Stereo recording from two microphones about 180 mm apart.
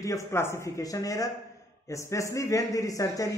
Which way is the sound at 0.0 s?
15° left (ahead or behind).